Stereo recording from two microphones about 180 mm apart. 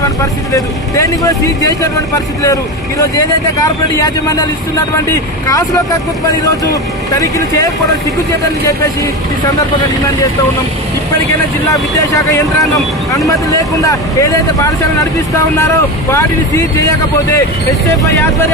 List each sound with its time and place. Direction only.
0.2 s speech: 20° left (ahead or behind)
11.7 s speech: 20° left (ahead or behind)